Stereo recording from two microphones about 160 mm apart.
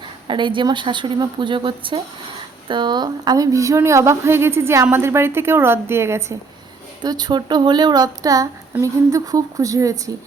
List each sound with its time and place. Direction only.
0.3 s a woman's voice: 30° right (ahead or behind)